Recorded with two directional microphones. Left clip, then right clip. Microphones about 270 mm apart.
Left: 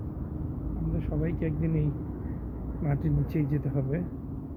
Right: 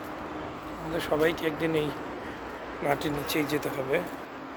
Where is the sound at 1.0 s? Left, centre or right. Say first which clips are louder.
Right 9 dB; right.